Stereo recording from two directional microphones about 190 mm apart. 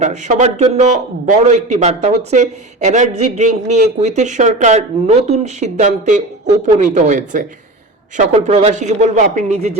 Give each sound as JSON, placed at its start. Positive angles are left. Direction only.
{"t": 0.0, "sound": "a man's voice", "side_deg": -40}